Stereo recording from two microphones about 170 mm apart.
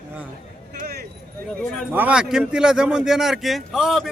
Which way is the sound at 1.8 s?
10° right (ahead or behind).